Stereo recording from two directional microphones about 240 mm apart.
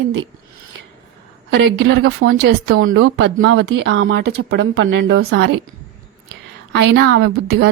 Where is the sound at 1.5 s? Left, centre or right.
Right.